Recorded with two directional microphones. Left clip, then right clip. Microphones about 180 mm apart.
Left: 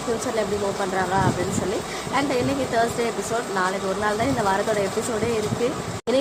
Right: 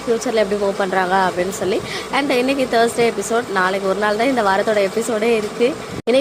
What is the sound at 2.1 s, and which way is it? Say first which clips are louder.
Speech: right 5 dB; 25° right (ahead or behind).